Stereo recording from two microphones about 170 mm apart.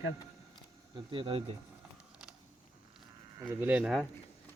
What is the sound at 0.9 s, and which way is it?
Speech, 30° right (ahead or behind).